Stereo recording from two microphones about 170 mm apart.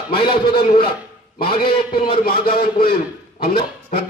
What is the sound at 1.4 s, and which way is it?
Speech, 30° left (ahead or behind).